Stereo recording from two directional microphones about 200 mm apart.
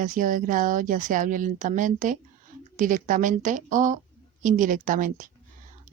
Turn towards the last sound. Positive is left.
turn(degrees=-40)  # may be behind; listen again after turning